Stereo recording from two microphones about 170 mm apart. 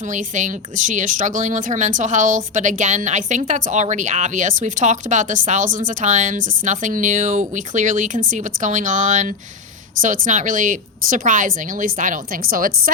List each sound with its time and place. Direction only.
0.1 s speech: 45° right (ahead or behind)